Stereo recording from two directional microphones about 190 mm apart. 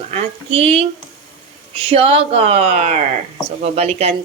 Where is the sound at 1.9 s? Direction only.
30° right (ahead or behind).